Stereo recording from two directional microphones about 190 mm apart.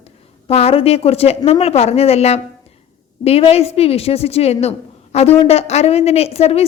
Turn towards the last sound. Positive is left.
turn(degrees=35)  # may be behind; listen again after turning